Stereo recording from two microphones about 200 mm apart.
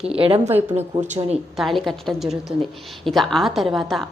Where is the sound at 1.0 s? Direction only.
35° right (ahead or behind).